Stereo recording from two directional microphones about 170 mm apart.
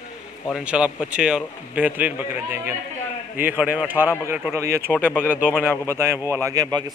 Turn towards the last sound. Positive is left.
turn(degrees=-20)  # may be behind; listen again after turning